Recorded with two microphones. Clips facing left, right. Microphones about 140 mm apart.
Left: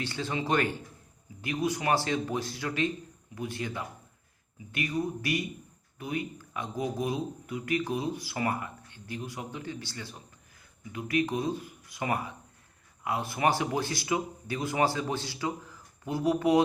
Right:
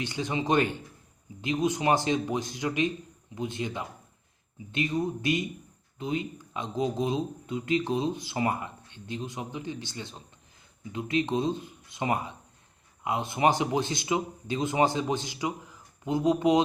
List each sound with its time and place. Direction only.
0.0 s speech: 15° right (ahead or behind)